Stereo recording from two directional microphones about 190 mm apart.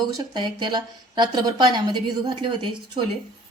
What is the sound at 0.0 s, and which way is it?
Speech, 20° right (ahead or behind).